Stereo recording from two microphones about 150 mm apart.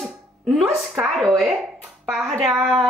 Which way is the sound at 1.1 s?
Centre (ahead or behind).